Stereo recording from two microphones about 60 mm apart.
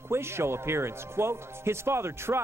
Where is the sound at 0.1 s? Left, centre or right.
Right.